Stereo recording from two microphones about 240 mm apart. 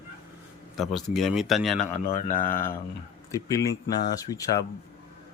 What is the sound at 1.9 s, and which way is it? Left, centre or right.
Speech, left.